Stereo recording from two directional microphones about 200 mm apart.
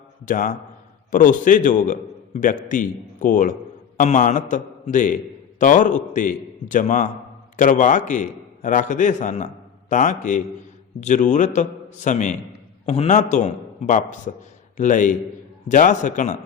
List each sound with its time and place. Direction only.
0.3 s a man's voice: 40° left (ahead or behind)